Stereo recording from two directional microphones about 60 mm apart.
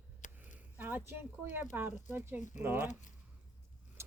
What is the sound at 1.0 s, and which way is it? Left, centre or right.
Speech, right.